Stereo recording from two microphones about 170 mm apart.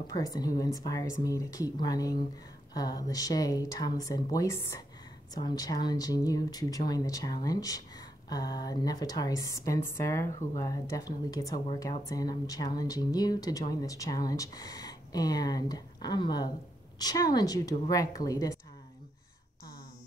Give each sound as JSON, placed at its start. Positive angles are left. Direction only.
{"t": 0.0, "sound": "speech", "side_deg": 20}